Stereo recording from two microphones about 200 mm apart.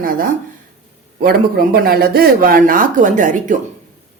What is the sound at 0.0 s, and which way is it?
A woman's voice, 45° right (ahead or behind).